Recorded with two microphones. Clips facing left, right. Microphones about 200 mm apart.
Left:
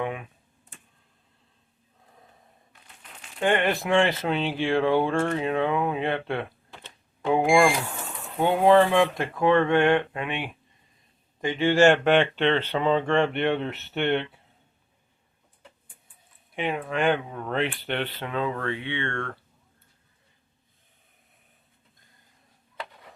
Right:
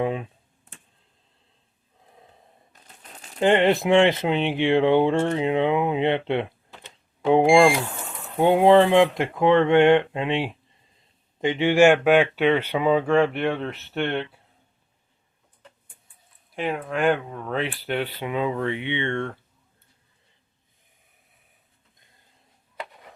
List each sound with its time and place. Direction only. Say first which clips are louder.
0.0 s computer keyboard: right 5 dB; 30° right (ahead or behind)
2.7 s crumpling: right 3 dB; 40° right (ahead or behind)
3.4 s speech: right 5 dB; 25° right (ahead or behind); by 14.3 s centre (ahead or behind)
16.6 s speech: right 1 dB; centre (ahead or behind); by 19.4 s 15° right (ahead or behind)